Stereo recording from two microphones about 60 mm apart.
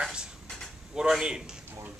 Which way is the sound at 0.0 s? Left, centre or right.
Centre.